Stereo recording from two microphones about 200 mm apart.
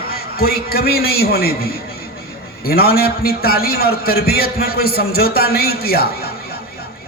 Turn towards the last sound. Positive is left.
turn(degrees=50)  # may be behind; listen again after turning